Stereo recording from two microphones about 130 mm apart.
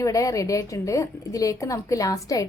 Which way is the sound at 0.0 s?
25° left (ahead or behind).